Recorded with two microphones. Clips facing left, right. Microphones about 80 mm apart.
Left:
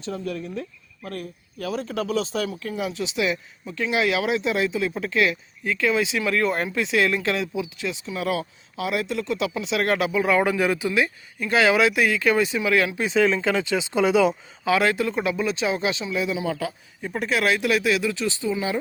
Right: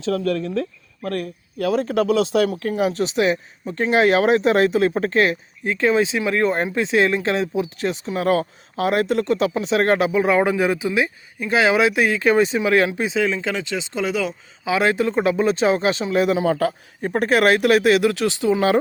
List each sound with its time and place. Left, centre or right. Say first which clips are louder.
0.0 s speech: right 8 dB; right
1.0 s speech: right 8 dB; right
13.1 s speech: left 1 dB; centre
14.6 s speech: right 2 dB; centre; by 18.8 s right